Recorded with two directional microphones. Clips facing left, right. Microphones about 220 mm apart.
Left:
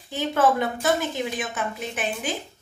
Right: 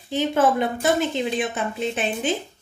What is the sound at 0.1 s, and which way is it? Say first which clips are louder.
Speech: right 2 dB; 20° right (ahead or behind).